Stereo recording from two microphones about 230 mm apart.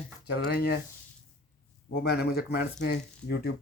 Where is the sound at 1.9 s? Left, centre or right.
Left.